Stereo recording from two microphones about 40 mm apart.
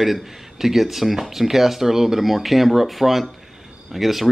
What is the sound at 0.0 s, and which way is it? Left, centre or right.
Speech, centre.